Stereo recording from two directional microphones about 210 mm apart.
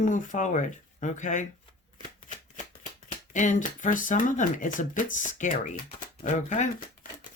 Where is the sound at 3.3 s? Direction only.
35° left (ahead or behind).